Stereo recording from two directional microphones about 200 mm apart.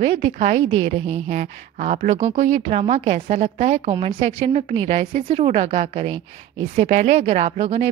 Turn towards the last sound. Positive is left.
turn(degrees=-30)  # may be behind; listen again after turning